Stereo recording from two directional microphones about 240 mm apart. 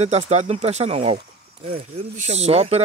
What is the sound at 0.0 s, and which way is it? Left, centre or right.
Speech, right.